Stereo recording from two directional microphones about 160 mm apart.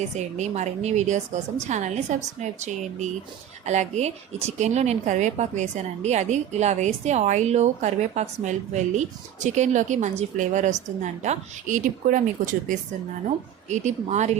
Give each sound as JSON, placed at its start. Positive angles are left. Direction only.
{"t": 0.3, "sound": "a woman's voice", "side_deg": -45}